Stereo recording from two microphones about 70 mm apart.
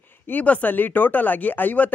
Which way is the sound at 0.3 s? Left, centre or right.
Left.